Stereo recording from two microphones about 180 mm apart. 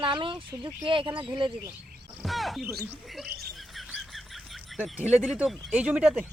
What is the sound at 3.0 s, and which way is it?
Fowl, centre (ahead or behind).